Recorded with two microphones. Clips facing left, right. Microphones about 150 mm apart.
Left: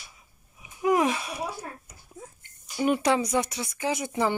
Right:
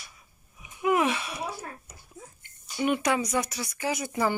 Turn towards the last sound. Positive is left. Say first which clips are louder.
# left 1 dB
turn(degrees=20)  # may be behind; listen again after turning